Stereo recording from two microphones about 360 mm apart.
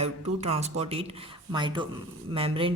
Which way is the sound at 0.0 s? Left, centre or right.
Centre.